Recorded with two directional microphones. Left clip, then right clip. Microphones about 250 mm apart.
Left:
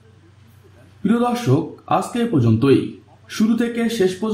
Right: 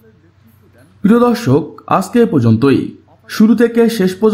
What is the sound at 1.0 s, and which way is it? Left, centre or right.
A man's voice, right.